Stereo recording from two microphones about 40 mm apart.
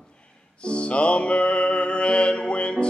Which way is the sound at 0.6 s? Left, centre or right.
Left.